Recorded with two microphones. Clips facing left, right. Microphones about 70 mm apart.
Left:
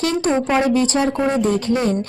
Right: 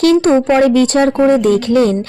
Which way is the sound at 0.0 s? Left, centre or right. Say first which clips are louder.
Right 9 dB; right.